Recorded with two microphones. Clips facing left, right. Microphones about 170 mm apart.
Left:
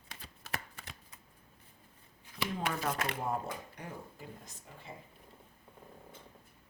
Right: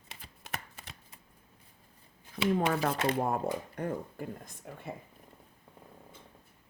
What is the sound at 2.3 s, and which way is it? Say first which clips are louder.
Speech: right 8 dB; 55° right (ahead or behind).